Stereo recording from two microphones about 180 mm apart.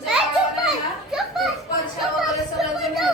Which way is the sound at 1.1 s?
Centre (ahead or behind).